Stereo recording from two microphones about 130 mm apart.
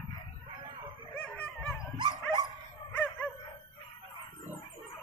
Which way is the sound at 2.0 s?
35° right (ahead or behind).